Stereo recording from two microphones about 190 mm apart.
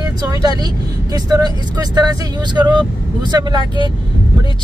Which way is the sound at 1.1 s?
20° right (ahead or behind).